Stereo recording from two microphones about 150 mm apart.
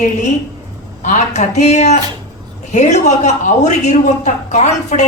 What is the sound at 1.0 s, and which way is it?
A woman's voice, 55° left (ahead or behind).